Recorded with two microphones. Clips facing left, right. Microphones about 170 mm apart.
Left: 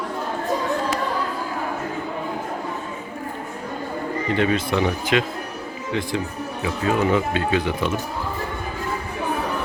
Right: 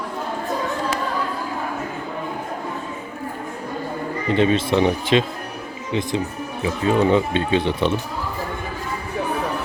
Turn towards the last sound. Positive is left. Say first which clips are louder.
# right 2 dB
turn(degrees=-25)  # may be behind; listen again after turning